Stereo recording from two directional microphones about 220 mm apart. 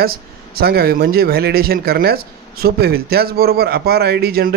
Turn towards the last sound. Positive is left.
turn(degrees=-45)  # may be behind; listen again after turning